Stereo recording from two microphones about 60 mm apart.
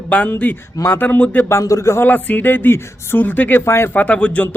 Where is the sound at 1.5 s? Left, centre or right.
Left.